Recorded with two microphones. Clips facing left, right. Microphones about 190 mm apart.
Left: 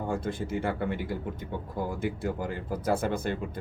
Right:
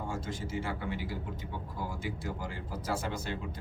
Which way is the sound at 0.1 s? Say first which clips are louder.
Left 6 dB; 60° left (ahead or behind).